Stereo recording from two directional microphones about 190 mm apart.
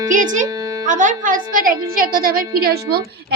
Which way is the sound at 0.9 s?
40° right (ahead or behind).